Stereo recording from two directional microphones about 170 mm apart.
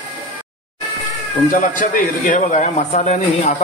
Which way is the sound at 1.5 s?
50° left (ahead or behind).